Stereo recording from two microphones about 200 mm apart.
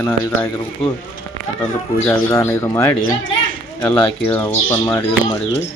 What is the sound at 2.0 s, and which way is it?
Speech, 10° left (ahead or behind).